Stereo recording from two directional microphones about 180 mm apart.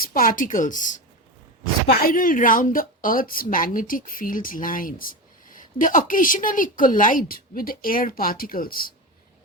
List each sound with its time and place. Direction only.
0.0 s a woman's voice: 50° left (ahead or behind)